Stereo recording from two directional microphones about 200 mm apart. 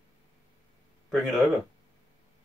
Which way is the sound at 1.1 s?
Centre (ahead or behind).